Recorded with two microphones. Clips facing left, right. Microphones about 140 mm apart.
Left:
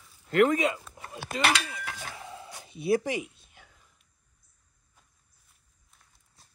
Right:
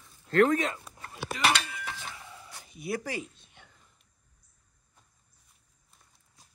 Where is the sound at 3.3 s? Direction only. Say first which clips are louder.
Even; 5° left (ahead or behind).